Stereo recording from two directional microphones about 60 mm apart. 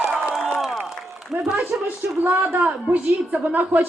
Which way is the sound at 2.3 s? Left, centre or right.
Right.